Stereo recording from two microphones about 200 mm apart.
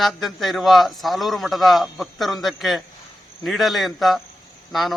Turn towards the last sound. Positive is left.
turn(degrees=0)  # may be behind; listen again after turning